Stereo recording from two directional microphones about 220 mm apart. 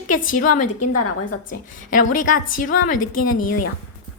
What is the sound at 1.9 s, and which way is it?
A woman's voice, 35° left (ahead or behind).